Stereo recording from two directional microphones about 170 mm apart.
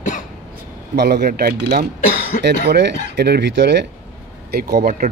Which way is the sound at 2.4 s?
90° right.